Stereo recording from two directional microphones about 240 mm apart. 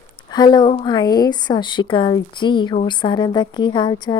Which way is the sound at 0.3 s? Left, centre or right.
Centre.